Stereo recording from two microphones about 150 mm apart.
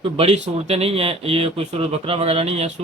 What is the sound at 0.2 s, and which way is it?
A man's voice, 45° right (ahead or behind).